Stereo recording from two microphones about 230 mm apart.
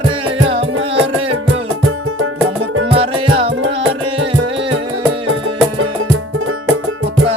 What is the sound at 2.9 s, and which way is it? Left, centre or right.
Music, right.